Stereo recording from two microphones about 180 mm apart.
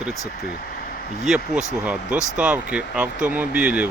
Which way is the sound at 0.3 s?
60° left (ahead or behind).